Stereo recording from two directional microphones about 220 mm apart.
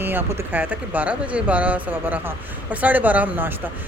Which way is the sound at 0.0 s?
10° right (ahead or behind).